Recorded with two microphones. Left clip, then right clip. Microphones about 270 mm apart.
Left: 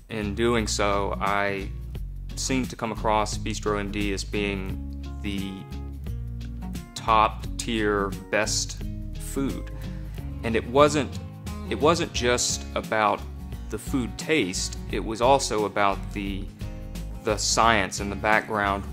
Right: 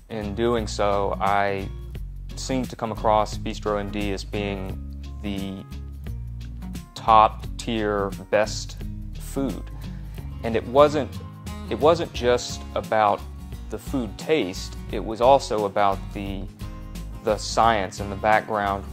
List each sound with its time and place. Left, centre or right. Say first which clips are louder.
0.1 s speech: right 1 dB; right
7.0 s speech: right 5 dB; right